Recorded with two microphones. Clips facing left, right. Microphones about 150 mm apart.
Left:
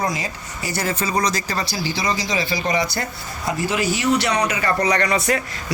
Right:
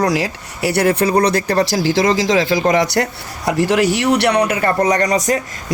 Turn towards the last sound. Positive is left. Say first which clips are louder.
# right 4 dB
turn(degrees=-40)  # may be behind; listen again after turning